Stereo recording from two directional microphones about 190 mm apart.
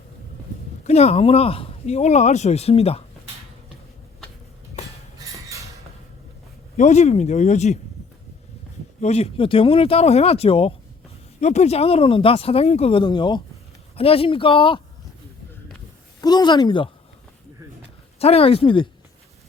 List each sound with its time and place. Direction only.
0.9 s speech: 35° left (ahead or behind)
6.7 s speech: 40° left (ahead or behind)
9.0 s speech: 35° left (ahead or behind)
16.2 s speech: 20° left (ahead or behind)
18.2 s speech: 30° left (ahead or behind)